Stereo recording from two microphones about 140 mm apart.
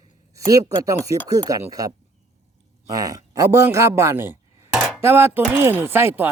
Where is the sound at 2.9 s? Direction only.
25° right (ahead or behind).